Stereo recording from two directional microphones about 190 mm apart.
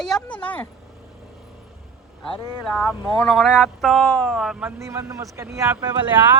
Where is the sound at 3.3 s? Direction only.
Centre (ahead or behind).